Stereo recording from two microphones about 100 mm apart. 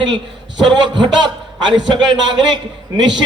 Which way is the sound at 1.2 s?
50° right (ahead or behind).